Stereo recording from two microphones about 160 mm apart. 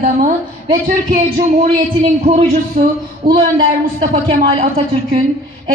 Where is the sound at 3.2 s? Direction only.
75° right (ahead or behind).